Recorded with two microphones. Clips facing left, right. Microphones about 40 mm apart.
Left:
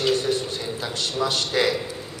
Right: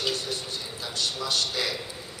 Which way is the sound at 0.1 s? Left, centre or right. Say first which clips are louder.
Left 10 dB; left.